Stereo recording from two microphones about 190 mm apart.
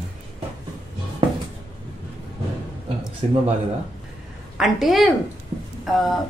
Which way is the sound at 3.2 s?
35° right (ahead or behind).